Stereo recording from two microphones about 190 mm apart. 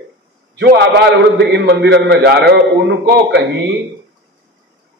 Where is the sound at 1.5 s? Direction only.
60° right (ahead or behind).